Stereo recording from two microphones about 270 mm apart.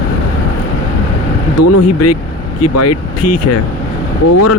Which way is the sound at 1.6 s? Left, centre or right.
Left.